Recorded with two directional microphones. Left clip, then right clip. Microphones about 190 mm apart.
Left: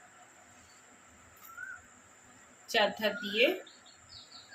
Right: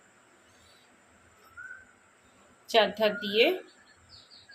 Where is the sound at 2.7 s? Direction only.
45° right (ahead or behind).